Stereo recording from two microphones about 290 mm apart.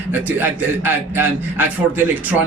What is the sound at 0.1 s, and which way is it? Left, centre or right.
A man's voice, centre.